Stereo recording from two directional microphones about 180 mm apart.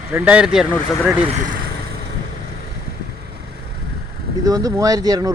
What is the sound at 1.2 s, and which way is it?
Speech, 40° right (ahead or behind).